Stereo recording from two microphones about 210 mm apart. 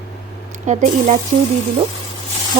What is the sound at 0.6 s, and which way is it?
Speech, 35° right (ahead or behind).